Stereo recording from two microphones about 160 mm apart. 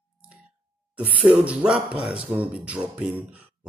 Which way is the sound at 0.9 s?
10° right (ahead or behind).